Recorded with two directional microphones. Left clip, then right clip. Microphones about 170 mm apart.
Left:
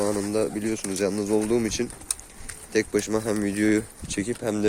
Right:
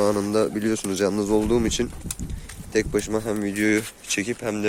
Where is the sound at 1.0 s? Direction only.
25° right (ahead or behind).